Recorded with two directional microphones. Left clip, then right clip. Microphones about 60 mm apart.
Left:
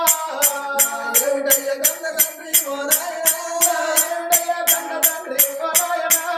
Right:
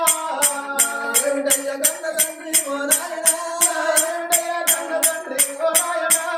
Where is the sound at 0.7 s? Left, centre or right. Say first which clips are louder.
Even; centre.